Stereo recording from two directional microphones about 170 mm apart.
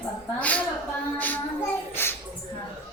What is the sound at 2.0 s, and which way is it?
Music, 10° left (ahead or behind).